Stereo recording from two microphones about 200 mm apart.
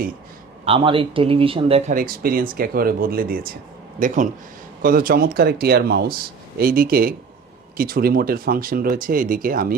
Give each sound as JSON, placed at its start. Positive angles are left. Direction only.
{"t": 0.6, "sound": "a man's voice", "side_deg": -25}
{"t": 1.9, "sound": "speech", "side_deg": -45}